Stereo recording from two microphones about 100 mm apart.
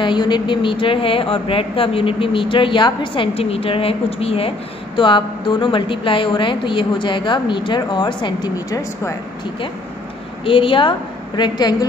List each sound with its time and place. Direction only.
0.0 s speech: 50° left (ahead or behind)
3.3 s speech: 75° left (ahead or behind); by 8.5 s 50° left (ahead or behind)
8.5 s speech: 35° left (ahead or behind)
10.4 s speech: 60° left (ahead or behind)